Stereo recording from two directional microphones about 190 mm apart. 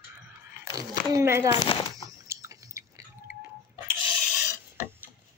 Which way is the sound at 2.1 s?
15° right (ahead or behind).